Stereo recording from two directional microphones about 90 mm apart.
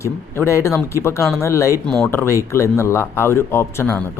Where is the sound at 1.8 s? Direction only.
10° left (ahead or behind).